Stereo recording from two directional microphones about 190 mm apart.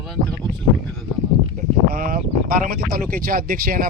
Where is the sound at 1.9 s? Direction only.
45° right (ahead or behind).